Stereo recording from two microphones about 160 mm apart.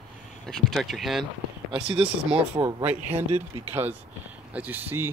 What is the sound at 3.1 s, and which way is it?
Speech, 40° right (ahead or behind).